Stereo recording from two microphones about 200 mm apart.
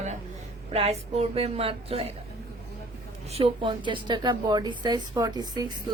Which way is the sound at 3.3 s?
30° right (ahead or behind).